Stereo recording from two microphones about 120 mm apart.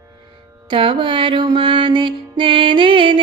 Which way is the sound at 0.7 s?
45° right (ahead or behind).